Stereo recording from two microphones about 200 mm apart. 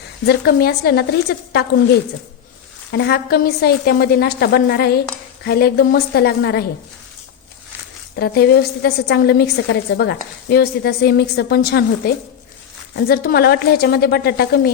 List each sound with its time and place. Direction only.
0.3 s a woman's voice: 55° left (ahead or behind)
8.1 s a woman's voice: 55° left (ahead or behind)